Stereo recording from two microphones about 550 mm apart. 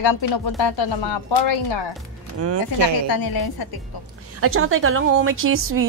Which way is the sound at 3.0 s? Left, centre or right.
Left.